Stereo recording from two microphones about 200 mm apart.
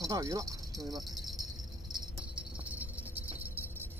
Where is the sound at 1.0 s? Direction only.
Centre (ahead or behind).